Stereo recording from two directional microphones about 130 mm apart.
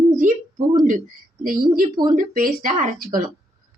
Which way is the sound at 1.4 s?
90° right.